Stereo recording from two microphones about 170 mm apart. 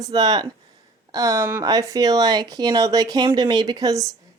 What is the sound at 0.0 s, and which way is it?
A woman's voice, 25° right (ahead or behind).